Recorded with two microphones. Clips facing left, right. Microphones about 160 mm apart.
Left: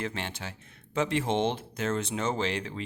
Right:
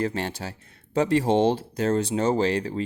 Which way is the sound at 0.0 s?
40° right (ahead or behind).